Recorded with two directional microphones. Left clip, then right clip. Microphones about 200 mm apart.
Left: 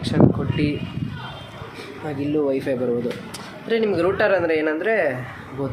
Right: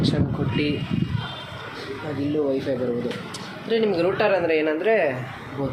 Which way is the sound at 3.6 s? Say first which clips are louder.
Left 1 dB; 15° left (ahead or behind).